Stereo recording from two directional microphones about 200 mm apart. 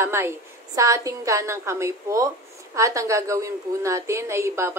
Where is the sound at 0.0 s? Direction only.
10° right (ahead or behind).